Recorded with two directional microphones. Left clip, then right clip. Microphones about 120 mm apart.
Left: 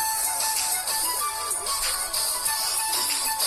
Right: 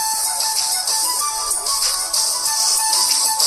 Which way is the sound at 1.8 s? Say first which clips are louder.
Right 8 dB; 90° right.